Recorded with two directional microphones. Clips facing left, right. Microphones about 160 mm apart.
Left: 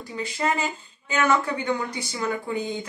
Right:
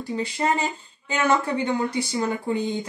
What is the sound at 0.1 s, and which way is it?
Speech, 30° right (ahead or behind).